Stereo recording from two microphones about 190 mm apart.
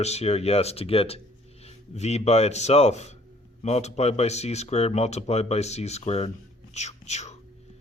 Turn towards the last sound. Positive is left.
turn(degrees=35)  # may be behind; listen again after turning